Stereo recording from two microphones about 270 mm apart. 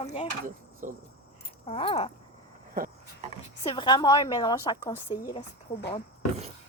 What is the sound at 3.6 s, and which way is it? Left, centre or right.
A woman's voice, centre.